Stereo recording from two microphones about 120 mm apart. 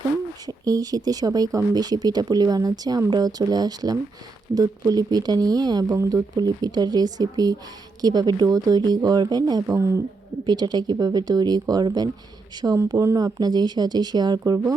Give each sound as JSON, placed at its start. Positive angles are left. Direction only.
{"t": 0.4, "sound": "speech", "side_deg": -30}
{"t": 10.4, "sound": "speech", "side_deg": -35}